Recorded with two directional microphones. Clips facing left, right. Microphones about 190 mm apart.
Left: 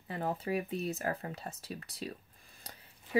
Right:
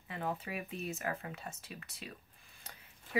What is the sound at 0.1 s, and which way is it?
Speech, 35° left (ahead or behind).